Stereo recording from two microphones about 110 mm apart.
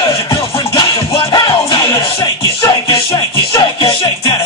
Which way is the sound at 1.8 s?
30° left (ahead or behind).